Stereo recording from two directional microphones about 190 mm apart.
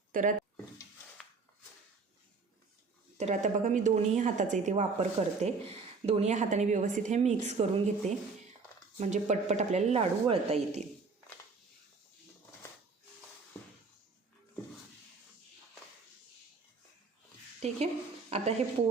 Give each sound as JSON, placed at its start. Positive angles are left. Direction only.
{"t": 0.1, "sound": "speech", "side_deg": -45}
{"t": 3.2, "sound": "a woman's voice", "side_deg": -40}
{"t": 17.6, "sound": "a woman's voice", "side_deg": -35}